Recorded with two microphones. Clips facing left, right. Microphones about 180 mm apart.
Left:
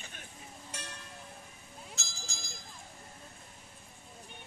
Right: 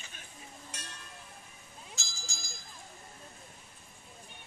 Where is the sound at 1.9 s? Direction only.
60° left (ahead or behind).